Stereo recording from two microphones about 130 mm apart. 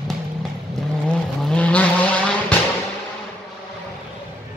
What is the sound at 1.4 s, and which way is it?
Vehicle, 10° left (ahead or behind).